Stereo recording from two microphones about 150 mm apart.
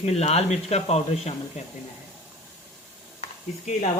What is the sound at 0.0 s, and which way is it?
Speech, 45° left (ahead or behind).